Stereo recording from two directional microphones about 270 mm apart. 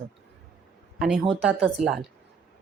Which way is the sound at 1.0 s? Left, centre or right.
Centre.